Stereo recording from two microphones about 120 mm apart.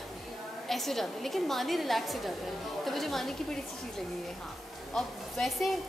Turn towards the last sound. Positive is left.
turn(degrees=0)  # may be behind; listen again after turning